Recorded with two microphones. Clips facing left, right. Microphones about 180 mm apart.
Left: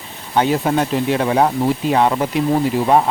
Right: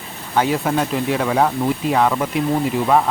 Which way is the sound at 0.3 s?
30° left (ahead or behind).